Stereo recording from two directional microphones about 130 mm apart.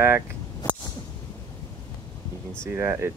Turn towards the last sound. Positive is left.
turn(degrees=-20)  # may be behind; listen again after turning